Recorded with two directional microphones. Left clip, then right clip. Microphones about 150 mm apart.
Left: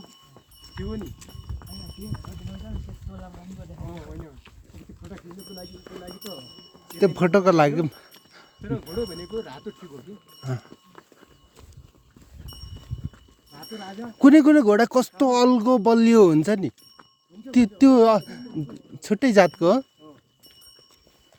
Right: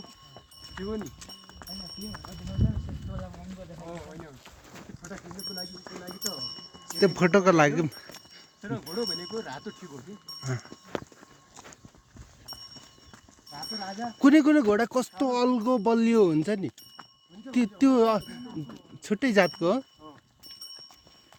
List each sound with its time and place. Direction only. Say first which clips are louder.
6.8 s speech: left 3 dB; 10° left (ahead or behind)
13.7 s speech: left 1 dB; 35° left (ahead or behind)